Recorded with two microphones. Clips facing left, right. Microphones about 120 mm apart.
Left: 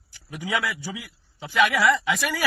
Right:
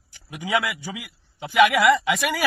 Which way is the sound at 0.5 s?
60° right (ahead or behind).